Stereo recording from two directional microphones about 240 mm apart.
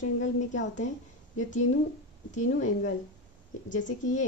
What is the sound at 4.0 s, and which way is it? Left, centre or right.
Speech, left.